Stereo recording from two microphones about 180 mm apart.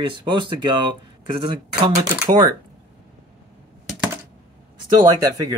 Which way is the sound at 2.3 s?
45° right (ahead or behind).